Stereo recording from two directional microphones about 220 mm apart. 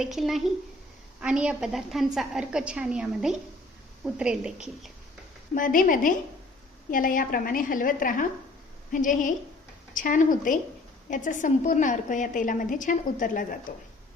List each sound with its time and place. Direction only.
0.0 s a woman's voice: centre (ahead or behind)
5.5 s a woman's voice: 40° left (ahead or behind)